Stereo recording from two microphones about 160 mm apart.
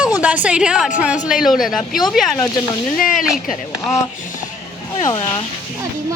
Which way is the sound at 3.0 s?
55° left (ahead or behind).